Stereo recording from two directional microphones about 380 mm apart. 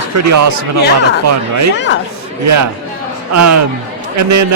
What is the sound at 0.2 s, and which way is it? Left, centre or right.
Speech, right.